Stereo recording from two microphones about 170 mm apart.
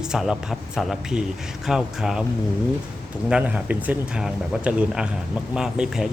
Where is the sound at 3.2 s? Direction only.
5° right (ahead or behind).